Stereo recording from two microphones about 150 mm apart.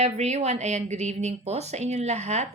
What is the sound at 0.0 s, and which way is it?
Speech, 45° right (ahead or behind).